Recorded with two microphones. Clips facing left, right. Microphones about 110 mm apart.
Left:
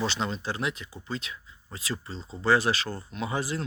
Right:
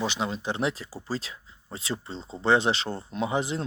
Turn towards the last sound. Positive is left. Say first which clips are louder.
# right 3 dB
turn(degrees=-20)  # may be behind; listen again after turning